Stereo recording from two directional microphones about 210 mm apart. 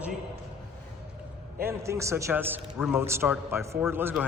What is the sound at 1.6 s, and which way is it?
A man's voice, 15° right (ahead or behind).